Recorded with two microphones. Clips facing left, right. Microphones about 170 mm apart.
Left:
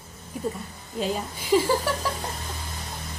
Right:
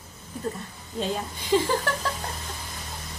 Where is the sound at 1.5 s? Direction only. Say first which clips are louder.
Left 2 dB; 10° left (ahead or behind).